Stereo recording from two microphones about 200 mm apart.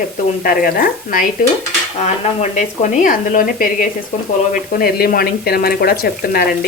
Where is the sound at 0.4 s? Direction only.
45° left (ahead or behind).